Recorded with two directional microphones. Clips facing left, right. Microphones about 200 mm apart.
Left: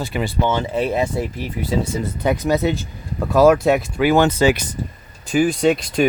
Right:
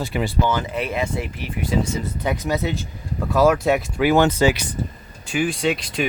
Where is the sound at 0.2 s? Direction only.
25° left (ahead or behind).